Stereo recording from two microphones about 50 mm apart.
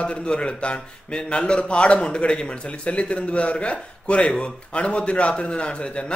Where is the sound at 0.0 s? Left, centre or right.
Left.